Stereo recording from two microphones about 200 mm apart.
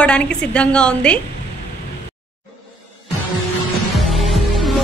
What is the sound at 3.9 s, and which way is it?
Music, centre (ahead or behind).